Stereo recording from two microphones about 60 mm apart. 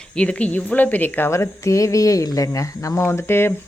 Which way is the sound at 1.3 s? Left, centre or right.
Left.